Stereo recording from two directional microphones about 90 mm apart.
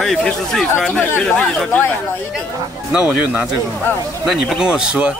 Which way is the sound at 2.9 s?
15° right (ahead or behind).